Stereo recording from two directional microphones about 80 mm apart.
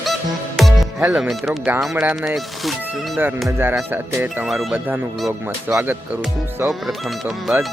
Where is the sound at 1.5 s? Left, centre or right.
Right.